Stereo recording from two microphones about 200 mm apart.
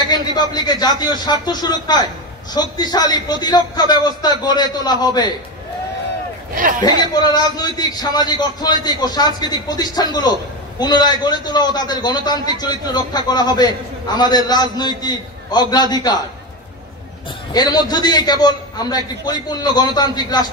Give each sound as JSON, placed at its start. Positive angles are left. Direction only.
{"t": 0.1, "sound": "a man's voice", "side_deg": 20}
{"t": 6.5, "sound": "a man's voice", "side_deg": -45}
{"t": 6.8, "sound": "a man's voice", "side_deg": 20}
{"t": 17.5, "sound": "a man's voice", "side_deg": 20}